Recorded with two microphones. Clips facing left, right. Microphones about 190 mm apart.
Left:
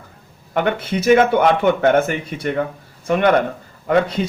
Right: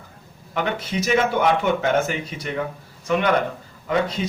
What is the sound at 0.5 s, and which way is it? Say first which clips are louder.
A man's voice: left 5 dB; 55° left (ahead or behind).